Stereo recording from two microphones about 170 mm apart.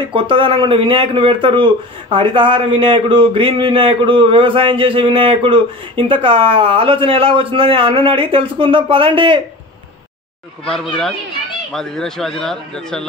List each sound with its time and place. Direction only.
0.0 s a man's voice: 30° right (ahead or behind)
11.7 s a man's voice: centre (ahead or behind)